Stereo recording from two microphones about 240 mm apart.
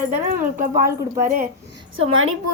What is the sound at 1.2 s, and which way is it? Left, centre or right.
Speech, right.